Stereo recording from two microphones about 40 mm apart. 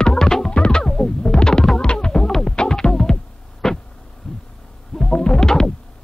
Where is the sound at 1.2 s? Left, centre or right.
Centre.